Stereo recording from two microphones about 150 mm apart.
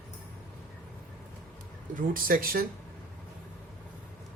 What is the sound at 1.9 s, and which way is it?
Speech, 70° right (ahead or behind).